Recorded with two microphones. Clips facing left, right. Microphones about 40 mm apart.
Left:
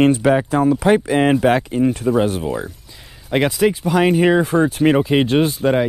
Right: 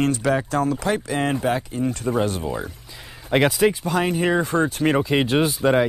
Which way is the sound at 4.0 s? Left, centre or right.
Left.